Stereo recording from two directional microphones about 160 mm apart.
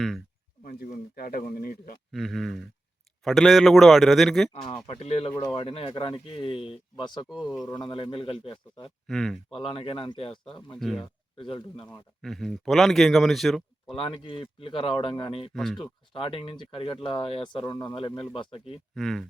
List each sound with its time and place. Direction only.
0.6 s speech: 60° left (ahead or behind)
2.1 s speech: centre (ahead or behind)
4.5 s speech: 35° left (ahead or behind)
7.3 s speech: centre (ahead or behind)
7.8 s speech: 30° left (ahead or behind)
9.0 s speech: centre (ahead or behind)
9.5 s speech: 35° left (ahead or behind)
10.8 s speech: centre (ahead or behind)
11.0 s speech: 35° left (ahead or behind)
11.9 s speech: centre (ahead or behind)
13.9 s speech: 35° left (ahead or behind)
15.5 s speech: centre (ahead or behind)
15.8 s speech: 35° left (ahead or behind)
18.9 s speech: centre (ahead or behind)